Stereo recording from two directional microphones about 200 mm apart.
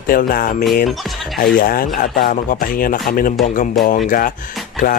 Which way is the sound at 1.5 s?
45° left (ahead or behind).